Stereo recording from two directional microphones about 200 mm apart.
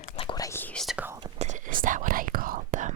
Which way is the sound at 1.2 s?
20° right (ahead or behind).